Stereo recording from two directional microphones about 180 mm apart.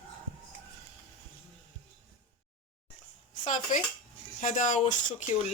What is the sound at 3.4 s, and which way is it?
Speech, 45° left (ahead or behind).